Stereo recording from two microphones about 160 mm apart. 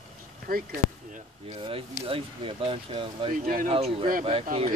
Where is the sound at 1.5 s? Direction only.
35° right (ahead or behind).